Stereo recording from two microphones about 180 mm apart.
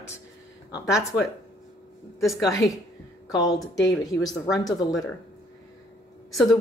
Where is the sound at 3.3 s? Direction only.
20° left (ahead or behind).